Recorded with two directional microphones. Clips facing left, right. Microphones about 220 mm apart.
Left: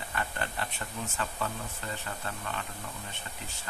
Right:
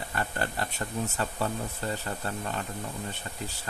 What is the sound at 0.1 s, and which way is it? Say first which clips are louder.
Speech: right 3 dB; 40° right (ahead or behind).